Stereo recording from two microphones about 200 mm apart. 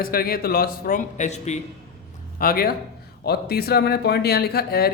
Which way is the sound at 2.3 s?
45° left (ahead or behind).